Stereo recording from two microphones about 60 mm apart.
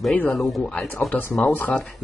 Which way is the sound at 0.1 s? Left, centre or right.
Left.